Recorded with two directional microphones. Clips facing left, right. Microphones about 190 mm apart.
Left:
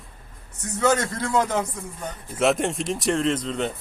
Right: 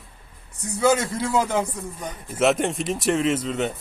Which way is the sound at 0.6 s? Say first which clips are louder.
Right 1 dB; 10° right (ahead or behind).